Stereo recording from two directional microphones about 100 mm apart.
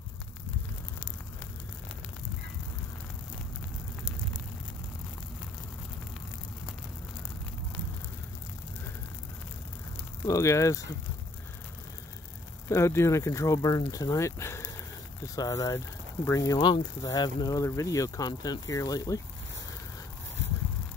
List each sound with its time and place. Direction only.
10.2 s speech: 30° left (ahead or behind)
12.6 s speech: 25° left (ahead or behind)
16.5 s speech: 50° left (ahead or behind)